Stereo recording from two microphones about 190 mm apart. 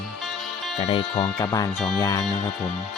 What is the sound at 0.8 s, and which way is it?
Speech, 25° left (ahead or behind).